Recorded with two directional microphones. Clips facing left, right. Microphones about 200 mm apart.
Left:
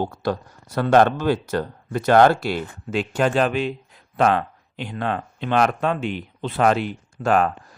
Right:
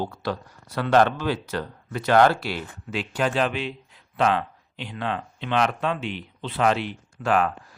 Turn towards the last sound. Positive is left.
turn(degrees=45)  # may be behind; listen again after turning